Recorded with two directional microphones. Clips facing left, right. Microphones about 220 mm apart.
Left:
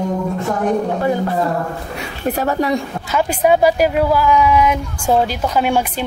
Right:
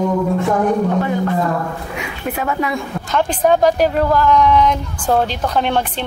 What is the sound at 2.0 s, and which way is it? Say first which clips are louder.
Speech: left 4 dB; 40° left (ahead or behind).